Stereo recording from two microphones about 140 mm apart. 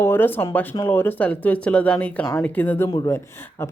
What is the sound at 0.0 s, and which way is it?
Speech, 15° left (ahead or behind).